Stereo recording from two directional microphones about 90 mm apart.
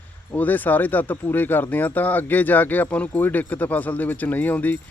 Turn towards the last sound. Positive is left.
turn(degrees=20)  # may be behind; listen again after turning